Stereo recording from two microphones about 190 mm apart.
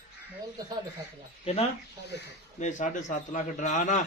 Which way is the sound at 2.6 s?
40° left (ahead or behind).